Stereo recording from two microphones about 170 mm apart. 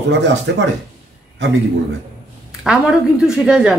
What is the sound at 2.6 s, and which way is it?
A woman's voice, 5° right (ahead or behind).